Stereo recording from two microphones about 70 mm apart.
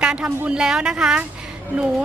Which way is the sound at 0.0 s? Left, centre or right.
Centre.